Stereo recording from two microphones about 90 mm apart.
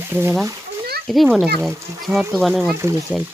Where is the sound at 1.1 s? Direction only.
Centre (ahead or behind).